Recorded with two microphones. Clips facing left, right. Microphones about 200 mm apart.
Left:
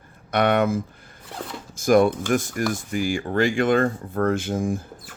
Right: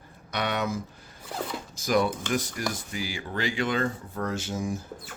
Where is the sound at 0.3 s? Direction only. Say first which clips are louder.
Left 9 dB; 55° left (ahead or behind).